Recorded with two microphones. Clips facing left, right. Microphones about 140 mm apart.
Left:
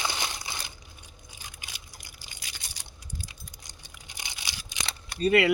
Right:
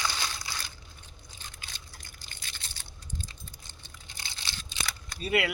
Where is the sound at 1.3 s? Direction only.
10° left (ahead or behind).